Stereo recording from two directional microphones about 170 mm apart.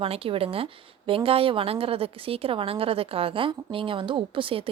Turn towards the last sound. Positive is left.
turn(degrees=-30)  # may be behind; listen again after turning